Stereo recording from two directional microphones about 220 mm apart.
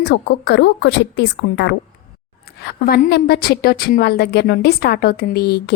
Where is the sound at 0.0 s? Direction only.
50° left (ahead or behind).